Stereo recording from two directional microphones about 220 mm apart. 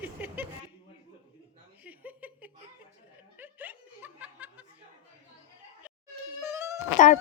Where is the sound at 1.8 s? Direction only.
5° right (ahead or behind).